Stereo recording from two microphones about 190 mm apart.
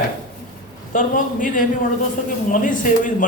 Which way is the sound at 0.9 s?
45° left (ahead or behind).